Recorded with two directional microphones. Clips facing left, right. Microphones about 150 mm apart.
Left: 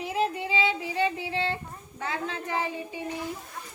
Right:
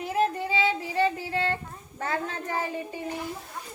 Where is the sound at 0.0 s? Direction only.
45° right (ahead or behind).